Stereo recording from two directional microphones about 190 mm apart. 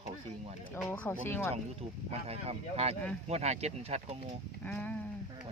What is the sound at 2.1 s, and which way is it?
Speech, 30° right (ahead or behind).